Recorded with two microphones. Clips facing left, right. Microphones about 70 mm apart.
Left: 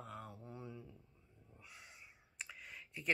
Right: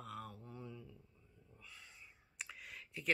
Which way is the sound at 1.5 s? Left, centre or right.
Centre.